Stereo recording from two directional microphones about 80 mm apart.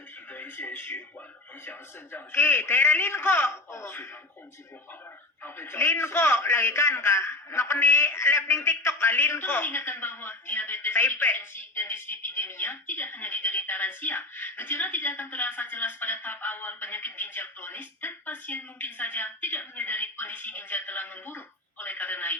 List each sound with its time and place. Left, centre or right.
0.3 s speech: left
2.1 s a man's voice: left
5.4 s a man's voice: left